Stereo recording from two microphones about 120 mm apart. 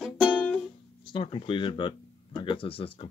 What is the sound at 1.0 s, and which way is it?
Speech, 45° left (ahead or behind).